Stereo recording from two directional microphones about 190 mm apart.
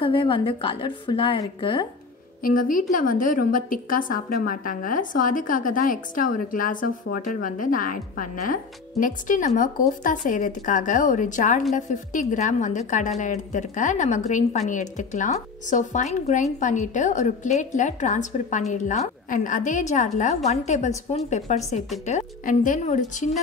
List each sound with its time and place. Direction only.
0.0 s a woman's voice: 25° left (ahead or behind)
2.4 s a woman's voice: 45° left (ahead or behind)